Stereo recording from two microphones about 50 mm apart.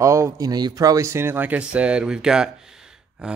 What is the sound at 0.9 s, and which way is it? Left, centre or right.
Speech, right.